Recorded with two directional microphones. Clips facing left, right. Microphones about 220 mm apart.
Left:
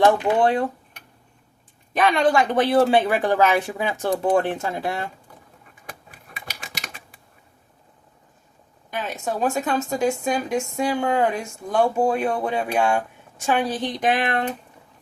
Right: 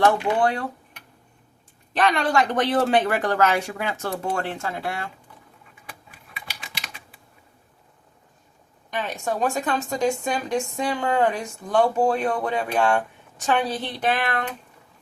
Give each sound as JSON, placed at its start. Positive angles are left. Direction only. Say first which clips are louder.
{"t": 0.4, "sound": "speech", "louder": "left 4 dB", "side_deg": 20}
{"t": 2.0, "sound": "speech", "louder": "left 2 dB", "side_deg": 15}
{"t": 6.4, "sound": "typing", "louder": "left 3 dB", "side_deg": 45}
{"t": 8.9, "sound": "speech", "louder": "even", "side_deg": 5}